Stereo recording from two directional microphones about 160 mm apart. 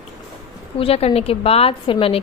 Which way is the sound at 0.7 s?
40° left (ahead or behind).